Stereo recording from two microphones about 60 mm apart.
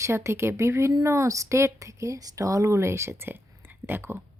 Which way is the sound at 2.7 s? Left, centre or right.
Right.